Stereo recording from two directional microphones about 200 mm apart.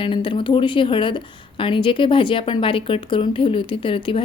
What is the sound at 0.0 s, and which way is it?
A woman's voice, 25° left (ahead or behind).